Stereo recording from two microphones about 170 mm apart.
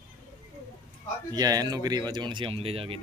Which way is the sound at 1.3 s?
20° right (ahead or behind).